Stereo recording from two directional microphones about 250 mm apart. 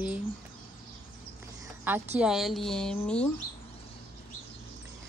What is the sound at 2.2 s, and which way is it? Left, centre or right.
Speech, centre.